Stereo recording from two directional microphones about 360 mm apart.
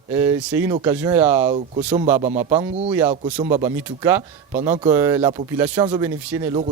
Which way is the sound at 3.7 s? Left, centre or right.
Centre.